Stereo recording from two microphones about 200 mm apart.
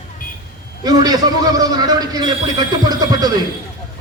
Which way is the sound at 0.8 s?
20° right (ahead or behind).